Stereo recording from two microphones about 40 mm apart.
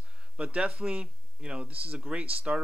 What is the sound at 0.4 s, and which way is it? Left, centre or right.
Speech, right.